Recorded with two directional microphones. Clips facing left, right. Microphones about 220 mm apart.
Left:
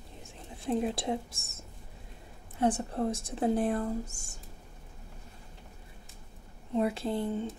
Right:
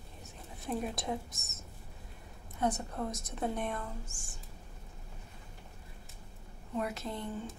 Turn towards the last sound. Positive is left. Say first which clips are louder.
# left 7 dB
turn(degrees=30)  # may be behind; listen again after turning